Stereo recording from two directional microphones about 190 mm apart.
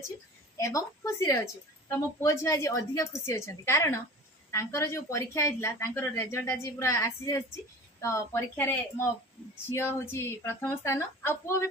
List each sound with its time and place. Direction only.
0.5 s speech: 15° left (ahead or behind)